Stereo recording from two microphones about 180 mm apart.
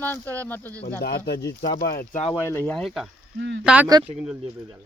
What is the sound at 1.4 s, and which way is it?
Speech, 20° left (ahead or behind).